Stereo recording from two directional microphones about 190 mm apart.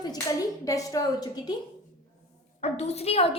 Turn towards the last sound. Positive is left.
turn(degrees=35)  # may be behind; listen again after turning